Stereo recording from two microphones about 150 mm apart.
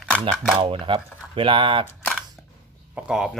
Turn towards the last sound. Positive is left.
turn(degrees=-5)  # may be behind; listen again after turning